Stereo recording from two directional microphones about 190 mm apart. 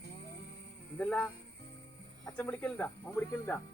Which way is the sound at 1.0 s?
5° left (ahead or behind).